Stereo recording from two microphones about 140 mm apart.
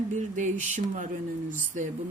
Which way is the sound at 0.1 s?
60° right (ahead or behind).